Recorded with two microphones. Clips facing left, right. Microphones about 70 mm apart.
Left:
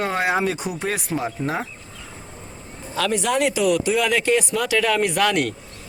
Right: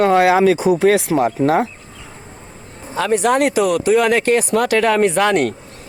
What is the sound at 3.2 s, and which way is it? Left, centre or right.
Speech, right.